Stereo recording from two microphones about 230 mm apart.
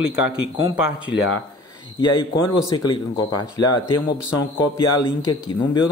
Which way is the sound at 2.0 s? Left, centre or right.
Centre.